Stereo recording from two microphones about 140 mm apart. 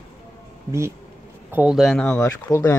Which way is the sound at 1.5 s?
5° right (ahead or behind).